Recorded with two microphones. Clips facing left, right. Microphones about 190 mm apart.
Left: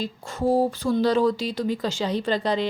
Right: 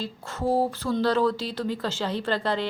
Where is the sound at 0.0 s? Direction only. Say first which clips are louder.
Left 3 dB; 15° left (ahead or behind).